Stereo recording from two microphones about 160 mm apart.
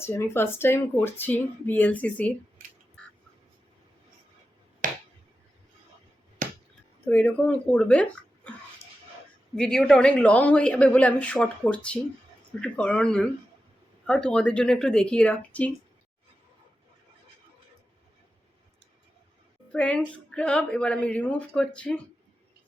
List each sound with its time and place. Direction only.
0.0 s speech: 15° left (ahead or behind)
4.8 s finger snapping: 55° right (ahead or behind)
6.4 s finger snapping: 55° right (ahead or behind)
7.0 s speech: 10° left (ahead or behind)
9.6 s speech: 5° left (ahead or behind)
19.7 s speech: 5° left (ahead or behind)